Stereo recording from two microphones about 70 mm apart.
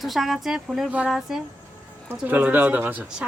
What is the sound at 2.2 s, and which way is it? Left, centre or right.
Speech, right.